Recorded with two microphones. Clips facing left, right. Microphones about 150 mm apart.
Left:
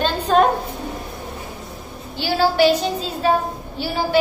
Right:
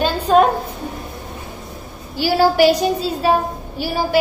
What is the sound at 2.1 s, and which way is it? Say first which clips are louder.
A woman's voice: right 3 dB; 10° right (ahead or behind).